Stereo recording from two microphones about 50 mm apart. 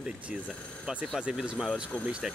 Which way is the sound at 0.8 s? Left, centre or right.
Centre.